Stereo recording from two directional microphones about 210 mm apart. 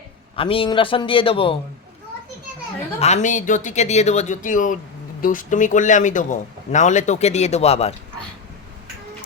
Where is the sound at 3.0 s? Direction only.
35° left (ahead or behind).